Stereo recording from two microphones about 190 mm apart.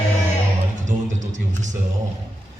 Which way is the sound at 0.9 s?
40° right (ahead or behind).